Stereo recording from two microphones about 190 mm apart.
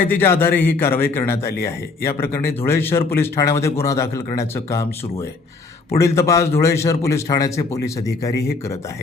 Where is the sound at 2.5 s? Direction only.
10° left (ahead or behind).